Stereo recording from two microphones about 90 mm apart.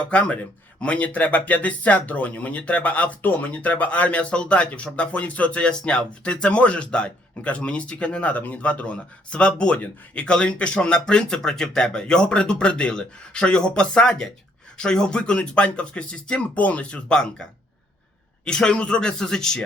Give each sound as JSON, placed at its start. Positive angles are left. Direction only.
{"t": 0.0, "sound": "speech", "side_deg": 15}
{"t": 18.4, "sound": "speech", "side_deg": 10}